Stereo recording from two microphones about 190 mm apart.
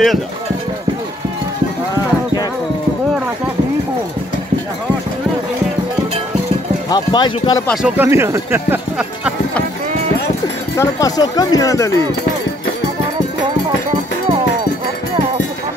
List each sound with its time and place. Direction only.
6.9 s speech: 25° left (ahead or behind)
7.6 s speech: centre (ahead or behind)
10.8 s speech: 20° left (ahead or behind)